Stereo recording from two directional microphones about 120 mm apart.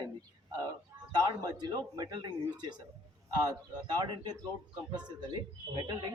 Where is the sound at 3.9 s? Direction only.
35° right (ahead or behind).